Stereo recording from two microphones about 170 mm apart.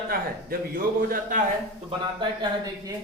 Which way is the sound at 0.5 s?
60° right (ahead or behind).